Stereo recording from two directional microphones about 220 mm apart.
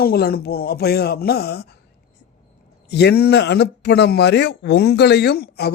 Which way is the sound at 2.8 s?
50° left (ahead or behind).